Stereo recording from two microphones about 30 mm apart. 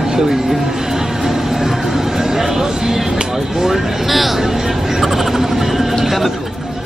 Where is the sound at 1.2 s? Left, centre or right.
Centre.